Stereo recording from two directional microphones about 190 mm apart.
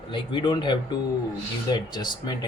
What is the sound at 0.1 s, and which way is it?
Speech, 25° left (ahead or behind).